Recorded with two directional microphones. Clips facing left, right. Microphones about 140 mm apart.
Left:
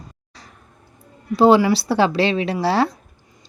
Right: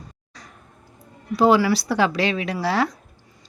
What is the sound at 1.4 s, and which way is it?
A woman's voice, 25° left (ahead or behind).